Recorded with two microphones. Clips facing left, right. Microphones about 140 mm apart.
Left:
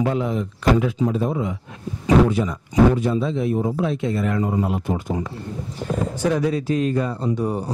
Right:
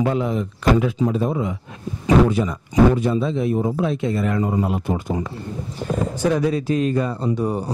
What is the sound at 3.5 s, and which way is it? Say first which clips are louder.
Speech: right 1 dB; 35° right (ahead or behind).